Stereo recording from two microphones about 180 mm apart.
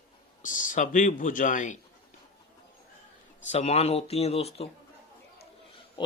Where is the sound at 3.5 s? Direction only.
35° left (ahead or behind).